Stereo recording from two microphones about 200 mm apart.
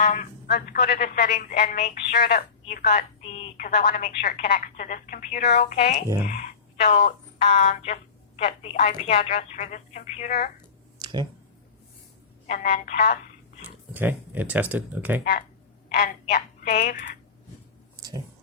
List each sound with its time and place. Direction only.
0.0 s a woman's voice: 40° left (ahead or behind)
0.4 s a woman's voice: 50° left (ahead or behind)
11.0 s a sound: 20° right (ahead or behind)
12.5 s speech: 40° left (ahead or behind)
13.7 s speech: 10° right (ahead or behind)
15.2 s a woman's voice: 45° left (ahead or behind)
17.9 s a sound: 20° right (ahead or behind)